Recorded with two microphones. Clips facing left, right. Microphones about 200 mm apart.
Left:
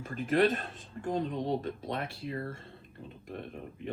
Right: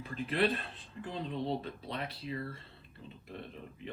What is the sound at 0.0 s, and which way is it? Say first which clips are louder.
Speech: left 5 dB; 45° left (ahead or behind).